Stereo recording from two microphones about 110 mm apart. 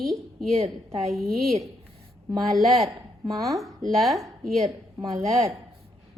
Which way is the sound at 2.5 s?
Centre (ahead or behind).